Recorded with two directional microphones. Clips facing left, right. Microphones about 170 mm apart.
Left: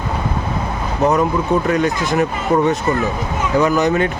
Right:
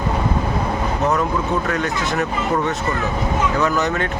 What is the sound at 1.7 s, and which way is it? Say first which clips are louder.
Speech: left 5 dB; 15° left (ahead or behind).